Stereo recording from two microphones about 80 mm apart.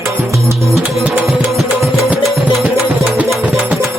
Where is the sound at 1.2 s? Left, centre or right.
Centre.